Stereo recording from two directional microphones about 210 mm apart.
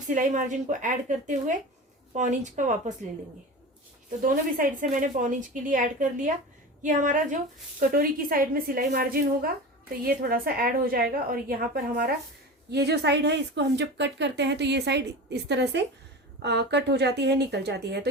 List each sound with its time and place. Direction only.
0.1 s a woman's voice: 40° right (ahead or behind)
4.2 s a woman's voice: 40° right (ahead or behind)